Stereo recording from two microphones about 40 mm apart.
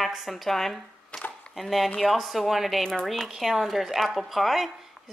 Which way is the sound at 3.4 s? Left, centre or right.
Centre.